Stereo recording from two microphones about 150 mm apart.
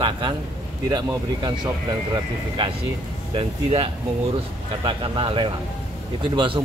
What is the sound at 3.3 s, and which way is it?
Speech, 35° right (ahead or behind).